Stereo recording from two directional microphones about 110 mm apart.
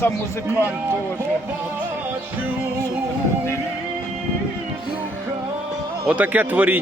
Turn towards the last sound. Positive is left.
turn(degrees=-15)  # may be behind; listen again after turning